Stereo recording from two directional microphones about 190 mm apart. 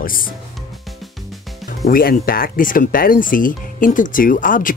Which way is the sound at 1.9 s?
50° left (ahead or behind).